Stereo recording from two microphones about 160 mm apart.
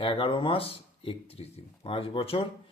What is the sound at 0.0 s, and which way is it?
Speech, 30° left (ahead or behind).